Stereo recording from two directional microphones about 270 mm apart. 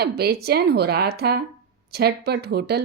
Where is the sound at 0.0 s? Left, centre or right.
Right.